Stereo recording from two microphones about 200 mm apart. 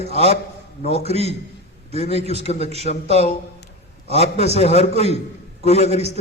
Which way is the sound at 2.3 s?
35° left (ahead or behind).